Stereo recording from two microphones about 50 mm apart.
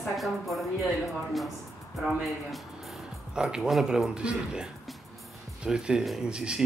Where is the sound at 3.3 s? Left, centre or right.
Centre.